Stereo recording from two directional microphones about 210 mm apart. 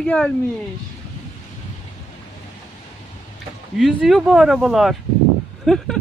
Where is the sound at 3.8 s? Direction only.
Centre (ahead or behind).